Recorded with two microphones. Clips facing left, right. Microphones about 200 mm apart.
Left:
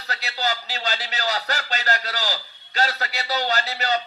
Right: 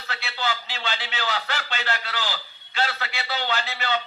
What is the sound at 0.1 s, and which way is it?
A man's voice, 40° left (ahead or behind).